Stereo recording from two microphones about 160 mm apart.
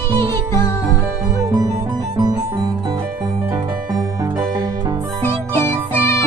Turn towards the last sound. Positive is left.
turn(degrees=15)  # may be behind; listen again after turning